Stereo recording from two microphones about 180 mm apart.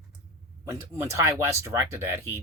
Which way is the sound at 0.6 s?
15° right (ahead or behind).